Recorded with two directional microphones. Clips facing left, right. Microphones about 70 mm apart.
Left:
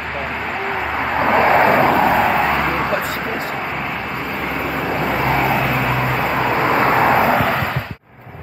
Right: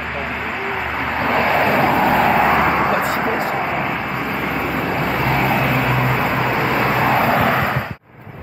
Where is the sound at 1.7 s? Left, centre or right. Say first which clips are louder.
Left 2 dB; centre.